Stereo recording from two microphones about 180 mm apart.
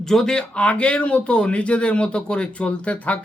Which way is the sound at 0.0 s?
Centre (ahead or behind).